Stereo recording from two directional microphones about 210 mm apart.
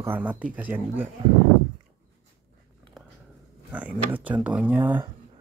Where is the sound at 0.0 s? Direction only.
10° right (ahead or behind).